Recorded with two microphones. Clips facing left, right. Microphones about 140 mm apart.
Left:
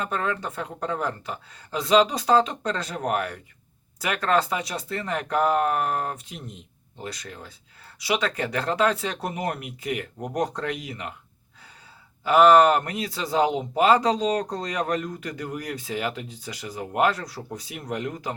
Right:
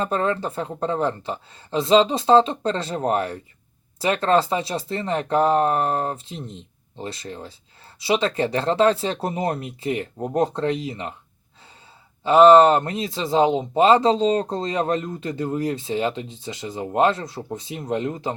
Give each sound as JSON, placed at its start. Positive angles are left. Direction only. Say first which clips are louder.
{"t": 0.0, "sound": "speech", "louder": "right 5 dB", "side_deg": -30}
{"t": 12.2, "sound": "speech", "louder": "right 4 dB", "side_deg": -25}